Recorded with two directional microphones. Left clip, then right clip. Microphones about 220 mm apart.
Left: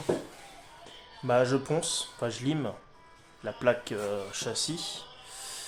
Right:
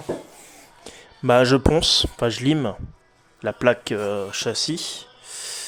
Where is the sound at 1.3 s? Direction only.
45° right (ahead or behind).